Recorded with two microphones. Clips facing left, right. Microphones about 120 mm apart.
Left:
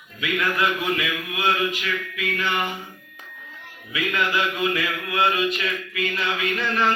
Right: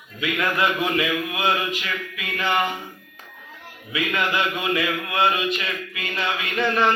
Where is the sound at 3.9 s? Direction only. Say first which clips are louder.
Even; 25° right (ahead or behind).